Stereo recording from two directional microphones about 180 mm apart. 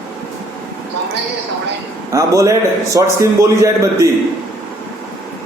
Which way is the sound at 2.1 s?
15° right (ahead or behind).